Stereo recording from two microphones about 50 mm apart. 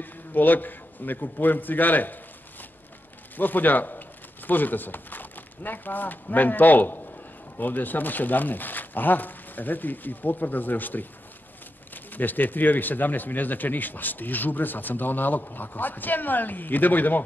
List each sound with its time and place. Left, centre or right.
0.0 s a man's voice: left
3.3 s speech: left